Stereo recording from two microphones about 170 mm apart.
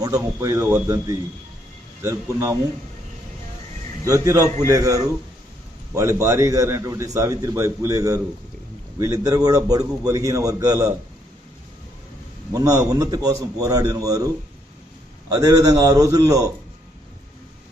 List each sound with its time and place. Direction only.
0.0 s a man's voice: 20° right (ahead or behind)
4.0 s a man's voice: 20° right (ahead or behind)
12.5 s a man's voice: 20° right (ahead or behind)
15.3 s a man's voice: 20° right (ahead or behind)